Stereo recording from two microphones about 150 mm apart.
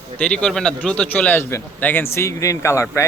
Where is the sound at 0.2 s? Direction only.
10° left (ahead or behind).